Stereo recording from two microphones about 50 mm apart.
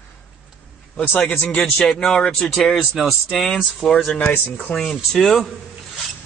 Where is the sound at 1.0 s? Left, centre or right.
Left.